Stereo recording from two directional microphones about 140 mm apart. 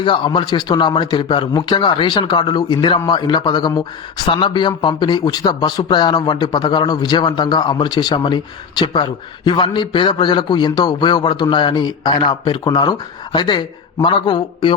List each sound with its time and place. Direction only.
0.0 s speech: 35° left (ahead or behind)